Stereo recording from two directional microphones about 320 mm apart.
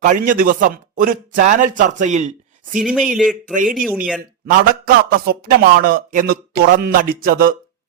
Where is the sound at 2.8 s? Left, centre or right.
Centre.